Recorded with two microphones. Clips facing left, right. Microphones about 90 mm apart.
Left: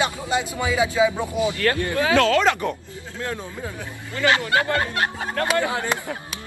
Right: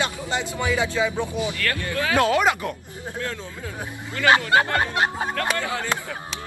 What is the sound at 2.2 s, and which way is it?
Speech, 15° right (ahead or behind).